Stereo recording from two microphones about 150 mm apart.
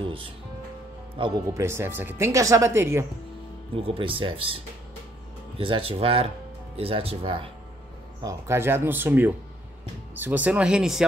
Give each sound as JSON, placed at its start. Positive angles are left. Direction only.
{"t": 0.0, "sound": "speech", "side_deg": -35}
{"t": 1.5, "sound": "speech", "side_deg": -15}
{"t": 3.7, "sound": "speech", "side_deg": -40}
{"t": 5.6, "sound": "speech", "side_deg": -35}
{"t": 8.2, "sound": "speech", "side_deg": -20}